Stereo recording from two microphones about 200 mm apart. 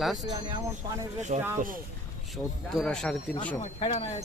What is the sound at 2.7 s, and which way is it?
Speech, 5° left (ahead or behind).